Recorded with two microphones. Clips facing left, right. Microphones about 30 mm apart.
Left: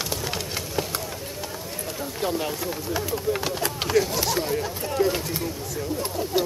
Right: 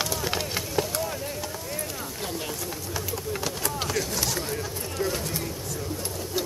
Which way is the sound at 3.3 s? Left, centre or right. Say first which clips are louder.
Left 3 dB; left.